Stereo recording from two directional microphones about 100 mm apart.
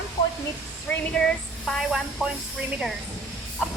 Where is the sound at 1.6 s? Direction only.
5° right (ahead or behind).